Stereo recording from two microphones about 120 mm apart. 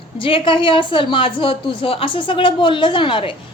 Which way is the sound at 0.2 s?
45° left (ahead or behind).